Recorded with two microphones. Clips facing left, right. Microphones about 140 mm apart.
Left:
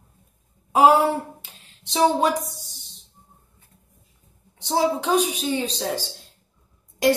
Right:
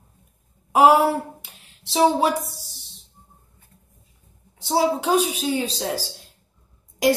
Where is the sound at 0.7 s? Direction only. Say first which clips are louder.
Right 1 dB; 10° right (ahead or behind).